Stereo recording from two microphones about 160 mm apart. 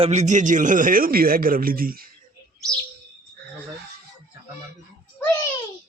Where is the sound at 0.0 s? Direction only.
45° right (ahead or behind); by 2.0 s 65° right (ahead or behind).